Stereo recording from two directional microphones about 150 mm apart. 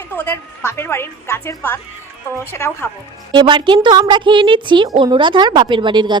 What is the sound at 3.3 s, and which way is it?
A woman's voice, 30° right (ahead or behind).